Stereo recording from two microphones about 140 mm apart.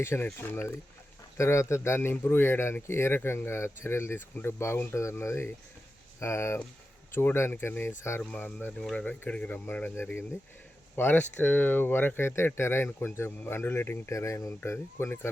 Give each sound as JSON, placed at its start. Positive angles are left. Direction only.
{"t": 0.0, "sound": "speech", "side_deg": 15}